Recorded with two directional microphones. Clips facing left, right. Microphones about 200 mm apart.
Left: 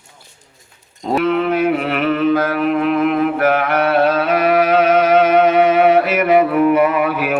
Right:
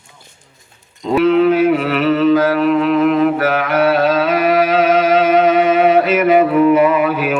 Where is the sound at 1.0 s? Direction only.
50° left (ahead or behind).